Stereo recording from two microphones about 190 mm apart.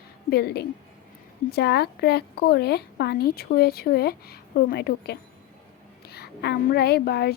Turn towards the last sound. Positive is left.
turn(degrees=55)  # may be behind; listen again after turning